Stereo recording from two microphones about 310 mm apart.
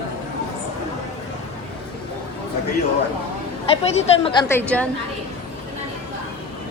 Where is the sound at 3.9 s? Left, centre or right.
Centre.